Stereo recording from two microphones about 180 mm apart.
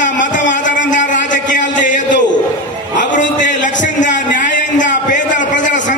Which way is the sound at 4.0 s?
45° left (ahead or behind).